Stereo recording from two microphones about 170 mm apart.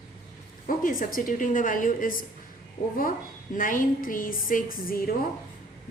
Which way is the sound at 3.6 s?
50° left (ahead or behind).